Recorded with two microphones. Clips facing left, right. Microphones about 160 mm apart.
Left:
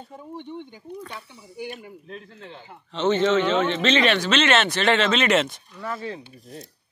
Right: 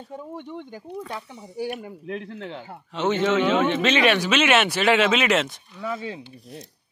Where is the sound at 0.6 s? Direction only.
45° right (ahead or behind).